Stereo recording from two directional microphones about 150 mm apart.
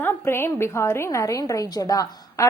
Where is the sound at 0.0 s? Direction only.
15° left (ahead or behind).